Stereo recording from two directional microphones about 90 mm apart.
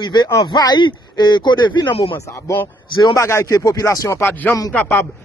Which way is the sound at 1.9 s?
80° left.